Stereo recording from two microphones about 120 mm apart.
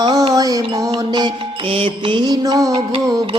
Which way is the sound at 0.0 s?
35° right (ahead or behind).